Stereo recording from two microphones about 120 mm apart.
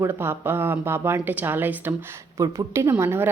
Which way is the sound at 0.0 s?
20° right (ahead or behind).